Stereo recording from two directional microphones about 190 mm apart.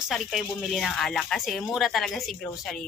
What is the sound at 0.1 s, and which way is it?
Speech, centre (ahead or behind).